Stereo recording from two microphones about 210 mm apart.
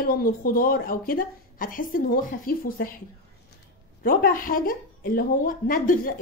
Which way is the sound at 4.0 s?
40° left (ahead or behind).